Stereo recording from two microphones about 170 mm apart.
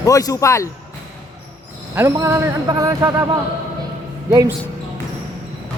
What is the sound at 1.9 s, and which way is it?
Speech, 15° right (ahead or behind).